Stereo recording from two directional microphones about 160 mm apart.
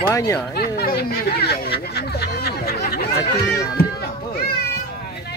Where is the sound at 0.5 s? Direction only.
80° left.